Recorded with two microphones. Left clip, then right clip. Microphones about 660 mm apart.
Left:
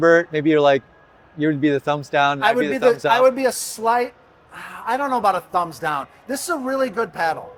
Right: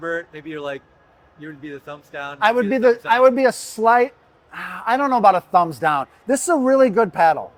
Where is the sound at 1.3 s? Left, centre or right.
Left.